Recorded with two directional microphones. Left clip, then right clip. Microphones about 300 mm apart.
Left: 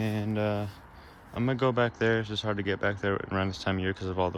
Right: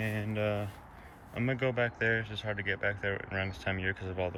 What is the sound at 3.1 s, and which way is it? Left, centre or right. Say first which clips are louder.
Speech: left 5 dB; left.